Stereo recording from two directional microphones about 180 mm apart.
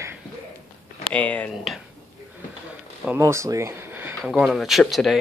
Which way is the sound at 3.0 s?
15° right (ahead or behind).